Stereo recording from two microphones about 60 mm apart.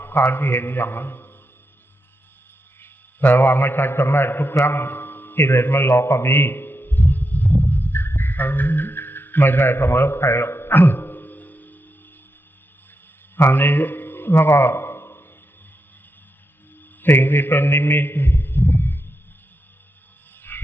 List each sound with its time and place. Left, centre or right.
0.0 s a man's voice: left
2.8 s a man's voice: left
4.6 s a sound: left
13.3 s a sound: left
17.0 s a man's voice: left
20.5 s frog: left